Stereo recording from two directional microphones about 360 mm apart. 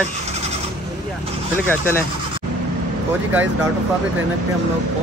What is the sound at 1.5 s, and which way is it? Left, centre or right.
Speech, centre.